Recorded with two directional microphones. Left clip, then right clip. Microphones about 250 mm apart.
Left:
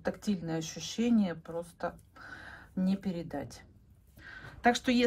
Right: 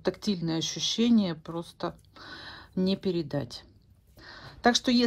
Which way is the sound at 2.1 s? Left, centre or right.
Left.